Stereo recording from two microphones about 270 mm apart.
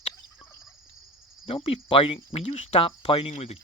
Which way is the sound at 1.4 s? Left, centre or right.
Left.